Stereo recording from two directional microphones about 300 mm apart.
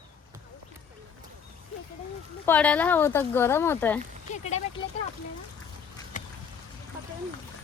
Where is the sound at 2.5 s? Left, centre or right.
Centre.